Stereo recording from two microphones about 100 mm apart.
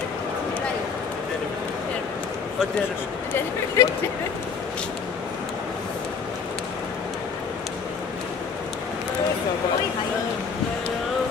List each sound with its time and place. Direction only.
3.3 s speech: 30° left (ahead or behind)